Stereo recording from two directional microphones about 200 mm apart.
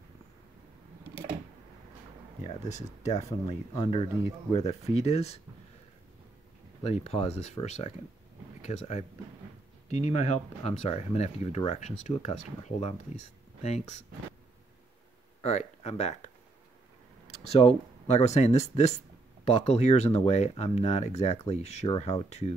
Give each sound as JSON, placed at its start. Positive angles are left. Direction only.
{"t": 2.4, "sound": "speech", "side_deg": 35}
{"t": 6.8, "sound": "speech", "side_deg": 30}
{"t": 15.4, "sound": "speech", "side_deg": 35}
{"t": 17.3, "sound": "speech", "side_deg": 30}